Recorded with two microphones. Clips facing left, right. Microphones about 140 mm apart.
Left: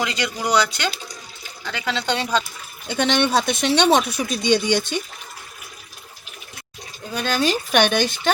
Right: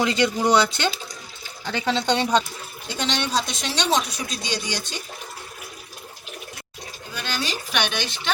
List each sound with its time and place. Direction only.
0.0 s speech: 25° right (ahead or behind)
2.9 s speech: 55° left (ahead or behind)
7.2 s speech: 50° left (ahead or behind)